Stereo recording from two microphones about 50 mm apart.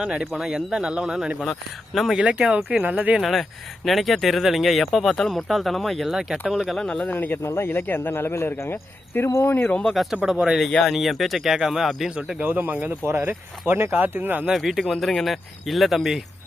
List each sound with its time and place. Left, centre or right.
0.0 s speech: centre
1.4 s speech: centre
2.1 s speech: centre
3.2 s speech: centre
6.1 s speech: centre
6.7 s speech: centre
7.1 s speech: left
7.4 s speech: left
8.7 s cricket: left
9.6 s speech: left
9.9 s speech: centre
12.4 s speech: right
14.5 s speech: centre